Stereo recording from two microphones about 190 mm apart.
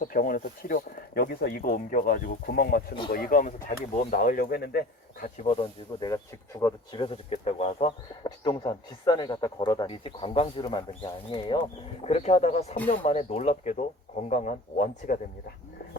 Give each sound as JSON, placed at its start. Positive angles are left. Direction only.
{"t": 0.0, "sound": "speech", "side_deg": 50}
{"t": 6.0, "sound": "speech", "side_deg": 20}
{"t": 6.9, "sound": "speech", "side_deg": 30}